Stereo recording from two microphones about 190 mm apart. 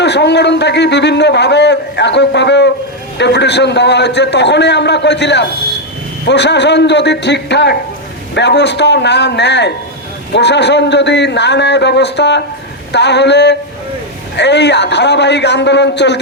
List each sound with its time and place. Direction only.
0.0 s a man's voice: 65° left (ahead or behind)